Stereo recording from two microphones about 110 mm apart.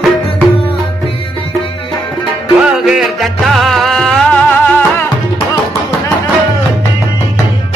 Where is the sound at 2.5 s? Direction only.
5° right (ahead or behind).